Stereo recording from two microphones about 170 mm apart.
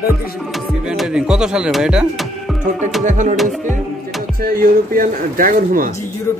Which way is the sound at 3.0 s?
45° right (ahead or behind).